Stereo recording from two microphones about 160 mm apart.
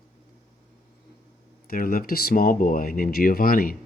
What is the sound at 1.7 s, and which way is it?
Speech, 65° left (ahead or behind).